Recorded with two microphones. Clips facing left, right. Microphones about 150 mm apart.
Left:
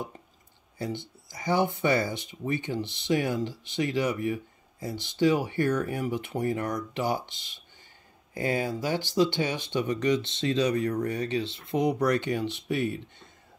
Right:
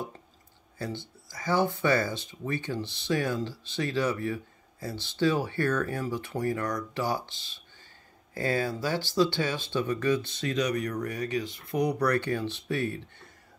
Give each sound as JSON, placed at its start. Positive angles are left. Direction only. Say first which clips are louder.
{"t": 0.7, "sound": "speech", "louder": "left 2 dB", "side_deg": 20}